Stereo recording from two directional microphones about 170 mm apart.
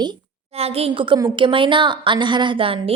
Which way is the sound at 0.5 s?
35° right (ahead or behind).